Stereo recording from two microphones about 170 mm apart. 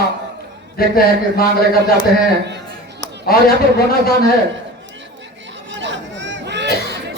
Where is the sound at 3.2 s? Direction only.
65° left (ahead or behind).